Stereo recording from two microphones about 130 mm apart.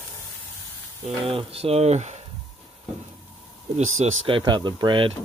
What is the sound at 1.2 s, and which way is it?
Speech, 45° right (ahead or behind).